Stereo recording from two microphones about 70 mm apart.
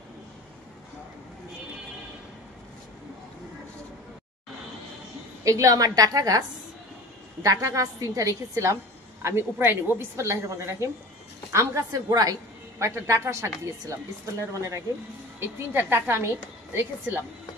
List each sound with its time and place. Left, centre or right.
5.4 s a woman's voice: right
7.4 s a woman's voice: right
9.2 s a woman's voice: right
12.7 s a woman's voice: right
14.5 s a woman's voice: right
15.4 s a woman's voice: right